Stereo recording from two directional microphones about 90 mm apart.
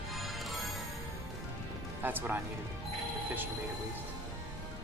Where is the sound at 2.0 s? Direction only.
20° right (ahead or behind).